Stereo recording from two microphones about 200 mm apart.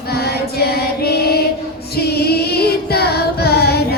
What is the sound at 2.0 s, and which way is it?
Female singing, 50° left (ahead or behind).